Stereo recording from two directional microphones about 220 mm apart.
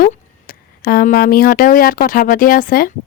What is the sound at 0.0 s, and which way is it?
Speech, 40° left (ahead or behind).